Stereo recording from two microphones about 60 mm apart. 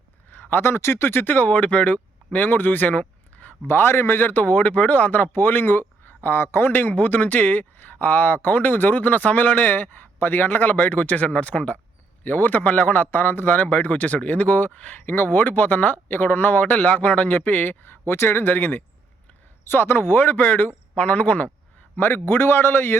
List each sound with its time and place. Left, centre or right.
0.3 s speech: left
3.7 s a man's voice: left
18.0 s speech: left
21.9 s a man's voice: left